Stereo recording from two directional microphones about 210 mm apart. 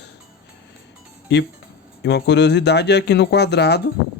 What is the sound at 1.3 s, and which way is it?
Speech, 55° left (ahead or behind).